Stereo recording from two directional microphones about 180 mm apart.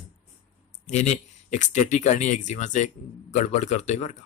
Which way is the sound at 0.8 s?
40° left (ahead or behind).